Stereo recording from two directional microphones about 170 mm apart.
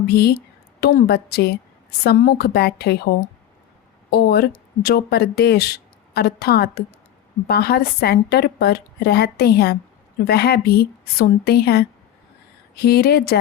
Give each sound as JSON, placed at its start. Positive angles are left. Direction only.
{"t": 0.1, "sound": "speech", "side_deg": 65}
{"t": 4.1, "sound": "speech", "side_deg": 65}